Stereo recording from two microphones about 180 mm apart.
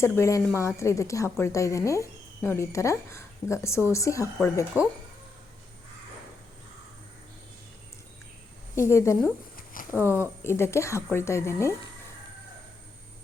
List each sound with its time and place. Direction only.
0.0 s a woman's voice: 15° left (ahead or behind)
4.7 s speech: 10° right (ahead or behind)
8.7 s a woman's voice: 15° left (ahead or behind)
9.8 s a sound: 50° left (ahead or behind)
10.1 s a woman's voice: 15° left (ahead or behind)